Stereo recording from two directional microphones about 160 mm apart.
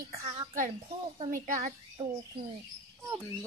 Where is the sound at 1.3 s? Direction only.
50° right (ahead or behind).